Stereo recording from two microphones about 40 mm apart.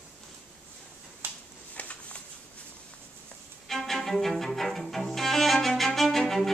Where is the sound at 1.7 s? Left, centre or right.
Left.